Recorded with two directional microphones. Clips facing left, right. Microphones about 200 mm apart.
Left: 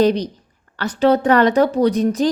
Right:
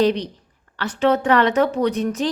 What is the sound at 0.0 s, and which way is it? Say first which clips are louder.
A woman's voice: left 3 dB; 40° left (ahead or behind).